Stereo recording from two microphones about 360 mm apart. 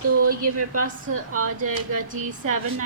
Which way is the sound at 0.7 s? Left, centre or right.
Right.